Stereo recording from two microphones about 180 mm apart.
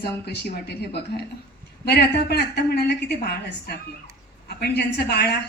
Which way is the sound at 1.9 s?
65° left (ahead or behind).